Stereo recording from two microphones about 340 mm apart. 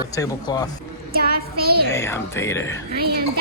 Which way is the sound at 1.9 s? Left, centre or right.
Centre.